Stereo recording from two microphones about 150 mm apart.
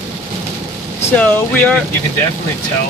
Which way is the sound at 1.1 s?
10° left (ahead or behind).